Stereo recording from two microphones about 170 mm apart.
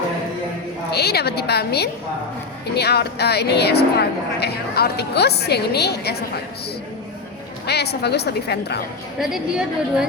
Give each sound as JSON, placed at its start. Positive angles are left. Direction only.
{"t": 0.9, "sound": "speech", "side_deg": 70}
{"t": 7.7, "sound": "speech", "side_deg": 75}
{"t": 9.2, "sound": "a woman's voice", "side_deg": -5}